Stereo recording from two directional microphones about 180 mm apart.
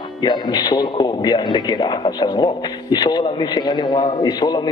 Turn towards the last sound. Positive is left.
turn(degrees=25)  # may be behind; listen again after turning